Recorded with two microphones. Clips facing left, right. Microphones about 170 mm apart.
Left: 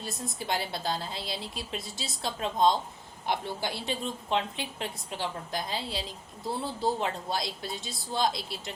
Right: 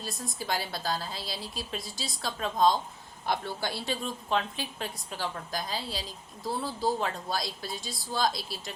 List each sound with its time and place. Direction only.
0.0 s a woman's voice: 25° left (ahead or behind)